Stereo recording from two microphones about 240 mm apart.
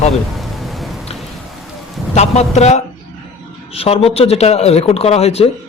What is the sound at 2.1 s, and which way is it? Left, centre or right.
Speech, left.